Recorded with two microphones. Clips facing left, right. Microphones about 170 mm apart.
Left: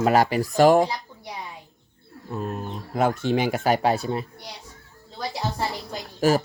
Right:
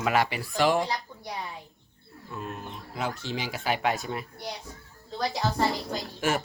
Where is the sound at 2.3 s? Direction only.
40° left (ahead or behind).